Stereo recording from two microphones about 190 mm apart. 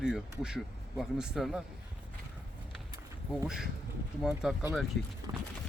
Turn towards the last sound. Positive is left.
turn(degrees=-15)  # may be behind; listen again after turning